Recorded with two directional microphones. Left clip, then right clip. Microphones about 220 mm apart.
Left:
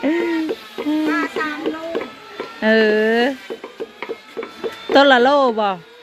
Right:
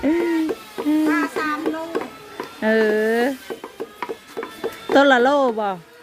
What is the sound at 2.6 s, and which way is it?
Speech, 10° right (ahead or behind).